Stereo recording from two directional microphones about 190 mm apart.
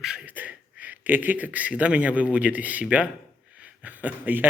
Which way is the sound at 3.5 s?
5° right (ahead or behind).